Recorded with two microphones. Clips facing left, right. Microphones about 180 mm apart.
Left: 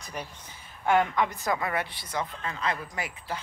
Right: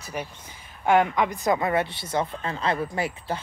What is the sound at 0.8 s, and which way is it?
A woman's voice, 15° right (ahead or behind).